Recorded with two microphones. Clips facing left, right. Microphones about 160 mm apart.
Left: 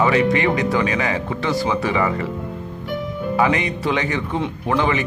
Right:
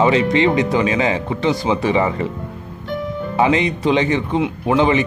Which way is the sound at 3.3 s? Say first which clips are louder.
Right 3 dB; 25° right (ahead or behind).